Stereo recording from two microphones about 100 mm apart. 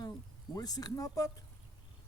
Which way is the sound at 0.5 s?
40° left (ahead or behind).